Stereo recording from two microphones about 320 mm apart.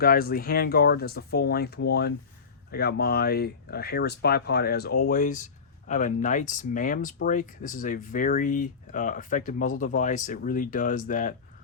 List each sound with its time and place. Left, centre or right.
0.0 s speech: left